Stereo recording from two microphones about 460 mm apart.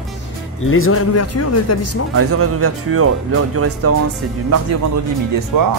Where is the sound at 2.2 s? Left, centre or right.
Right.